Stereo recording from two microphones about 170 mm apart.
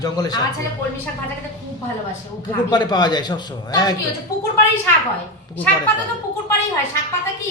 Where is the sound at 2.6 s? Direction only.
25° left (ahead or behind).